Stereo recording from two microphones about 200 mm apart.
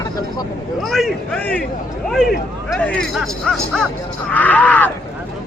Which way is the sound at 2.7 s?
5° left (ahead or behind).